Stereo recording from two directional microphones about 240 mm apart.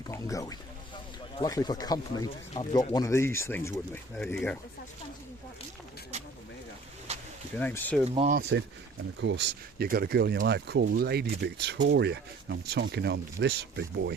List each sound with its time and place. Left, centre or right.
0.1 s speech: centre
7.1 s a sound: right
7.6 s speech: centre
8.0 s speech: right
8.4 s speech: right